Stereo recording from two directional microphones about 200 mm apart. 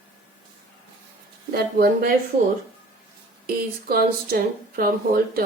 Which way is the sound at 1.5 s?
50° right (ahead or behind).